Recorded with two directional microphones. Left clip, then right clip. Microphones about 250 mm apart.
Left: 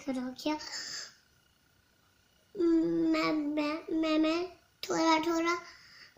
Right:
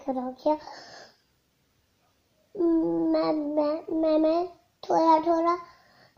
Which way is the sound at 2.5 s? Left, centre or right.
Left.